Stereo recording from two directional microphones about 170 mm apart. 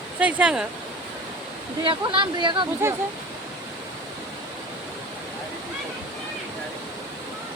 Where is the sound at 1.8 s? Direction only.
30° right (ahead or behind).